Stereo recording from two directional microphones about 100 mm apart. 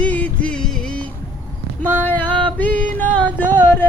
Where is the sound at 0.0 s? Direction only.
15° left (ahead or behind).